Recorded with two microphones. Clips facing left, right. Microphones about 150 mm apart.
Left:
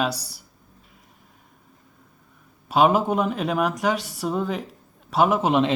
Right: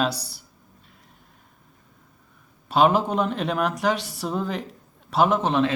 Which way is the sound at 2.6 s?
Centre (ahead or behind).